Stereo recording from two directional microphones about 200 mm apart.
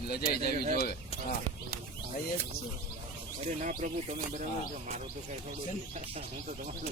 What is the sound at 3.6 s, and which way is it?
Speech, 40° right (ahead or behind).